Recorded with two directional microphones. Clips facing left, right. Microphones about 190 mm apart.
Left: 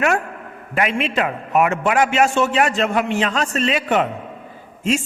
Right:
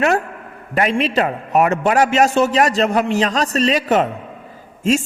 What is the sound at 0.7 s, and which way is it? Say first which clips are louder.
A man's voice: right 3 dB; 35° right (ahead or behind).